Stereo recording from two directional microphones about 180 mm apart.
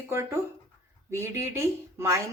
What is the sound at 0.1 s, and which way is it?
Speech, 15° right (ahead or behind).